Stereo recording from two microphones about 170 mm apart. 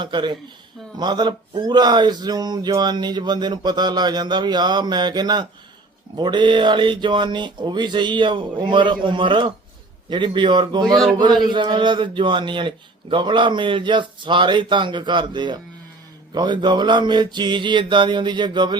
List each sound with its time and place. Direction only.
0.0 s speech: 25° right (ahead or behind)